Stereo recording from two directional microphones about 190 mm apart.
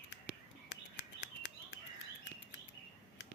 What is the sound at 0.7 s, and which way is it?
Bird, 65° left (ahead or behind).